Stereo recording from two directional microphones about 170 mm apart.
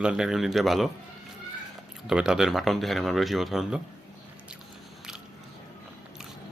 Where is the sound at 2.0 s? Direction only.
5° right (ahead or behind).